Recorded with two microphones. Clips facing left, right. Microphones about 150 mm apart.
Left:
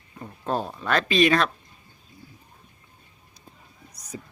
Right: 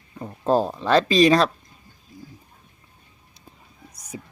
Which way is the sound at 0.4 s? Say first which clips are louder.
Right 7 dB; 35° right (ahead or behind).